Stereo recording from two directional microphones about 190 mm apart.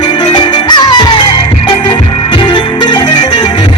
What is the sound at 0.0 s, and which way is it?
Music, 25° left (ahead or behind).